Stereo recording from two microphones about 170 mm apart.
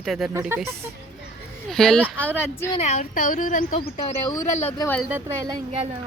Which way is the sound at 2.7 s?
40° left (ahead or behind).